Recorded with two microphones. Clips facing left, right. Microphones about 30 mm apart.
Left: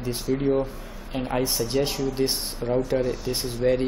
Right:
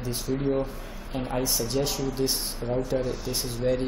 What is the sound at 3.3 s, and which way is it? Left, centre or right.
Speech, left.